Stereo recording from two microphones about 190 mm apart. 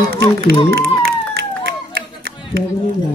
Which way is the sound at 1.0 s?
55° right (ahead or behind).